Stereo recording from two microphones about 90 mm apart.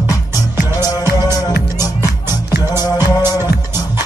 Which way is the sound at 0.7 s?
40° left (ahead or behind).